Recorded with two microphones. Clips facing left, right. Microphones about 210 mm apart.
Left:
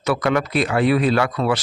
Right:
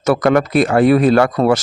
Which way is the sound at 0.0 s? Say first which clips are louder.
Right 6 dB; 45° right (ahead or behind).